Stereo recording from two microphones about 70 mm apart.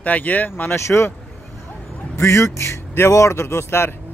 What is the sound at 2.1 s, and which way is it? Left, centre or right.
Speech, left.